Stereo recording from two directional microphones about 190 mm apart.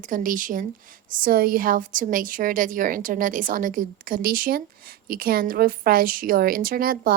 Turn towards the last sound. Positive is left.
turn(degrees=-50)  # may be behind; listen again after turning